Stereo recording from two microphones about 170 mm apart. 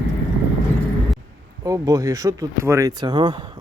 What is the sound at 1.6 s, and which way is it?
Speech, 20° right (ahead or behind).